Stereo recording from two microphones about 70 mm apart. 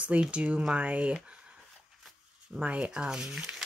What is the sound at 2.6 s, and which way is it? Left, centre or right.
Speech, centre.